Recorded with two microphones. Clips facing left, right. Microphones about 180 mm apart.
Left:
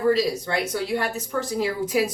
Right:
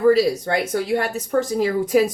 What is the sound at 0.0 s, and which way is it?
Speech, 50° right (ahead or behind).